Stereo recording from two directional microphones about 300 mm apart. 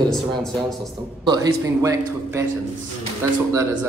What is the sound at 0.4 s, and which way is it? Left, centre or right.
Speech, centre.